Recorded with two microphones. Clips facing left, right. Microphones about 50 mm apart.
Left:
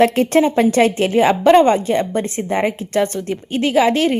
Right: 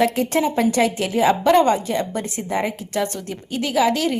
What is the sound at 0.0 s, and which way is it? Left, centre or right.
A woman's voice, left.